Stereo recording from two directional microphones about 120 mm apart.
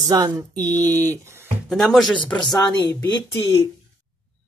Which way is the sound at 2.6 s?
30° left (ahead or behind).